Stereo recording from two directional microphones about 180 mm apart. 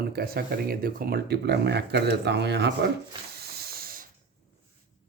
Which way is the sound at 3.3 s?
60° right (ahead or behind).